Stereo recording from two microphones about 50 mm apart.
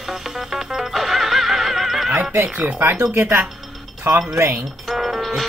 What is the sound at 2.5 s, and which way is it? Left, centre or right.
Speech, right.